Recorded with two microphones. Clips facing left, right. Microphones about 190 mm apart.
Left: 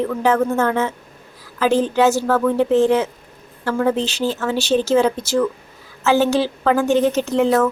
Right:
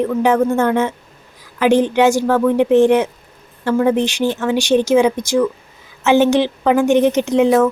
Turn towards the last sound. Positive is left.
turn(degrees=-15)  # may be behind; listen again after turning